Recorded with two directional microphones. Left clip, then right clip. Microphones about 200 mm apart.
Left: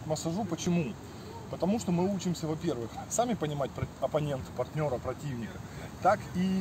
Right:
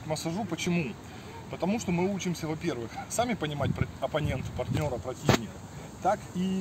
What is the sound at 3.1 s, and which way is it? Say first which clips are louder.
Speech: even; 15° left (ahead or behind).